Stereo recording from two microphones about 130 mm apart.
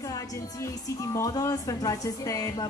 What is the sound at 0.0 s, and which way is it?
Speech, 25° left (ahead or behind).